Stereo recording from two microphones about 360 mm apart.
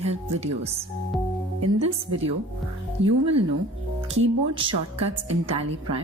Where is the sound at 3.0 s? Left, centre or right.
Right.